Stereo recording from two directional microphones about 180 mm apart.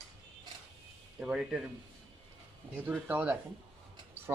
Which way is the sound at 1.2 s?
5° right (ahead or behind).